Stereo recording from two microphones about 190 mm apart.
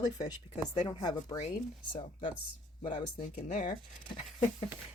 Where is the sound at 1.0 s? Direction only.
20° left (ahead or behind).